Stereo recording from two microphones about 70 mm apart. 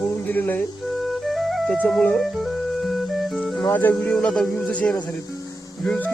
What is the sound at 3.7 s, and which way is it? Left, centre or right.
Speech, left.